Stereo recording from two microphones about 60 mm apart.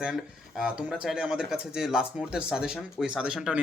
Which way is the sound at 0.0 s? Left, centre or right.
Centre.